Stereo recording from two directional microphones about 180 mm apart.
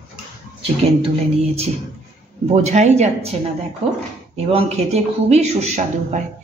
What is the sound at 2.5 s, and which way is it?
Speech, 40° right (ahead or behind).